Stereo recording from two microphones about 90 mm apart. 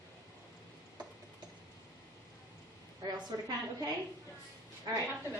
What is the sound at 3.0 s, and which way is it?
Speech, 50° right (ahead or behind).